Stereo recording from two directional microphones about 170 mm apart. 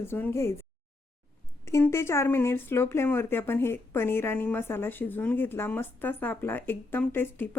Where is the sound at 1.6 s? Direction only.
15° left (ahead or behind).